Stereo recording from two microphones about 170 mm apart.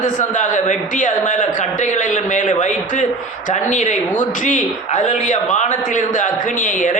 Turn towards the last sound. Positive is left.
turn(degrees=50)  # may be behind; listen again after turning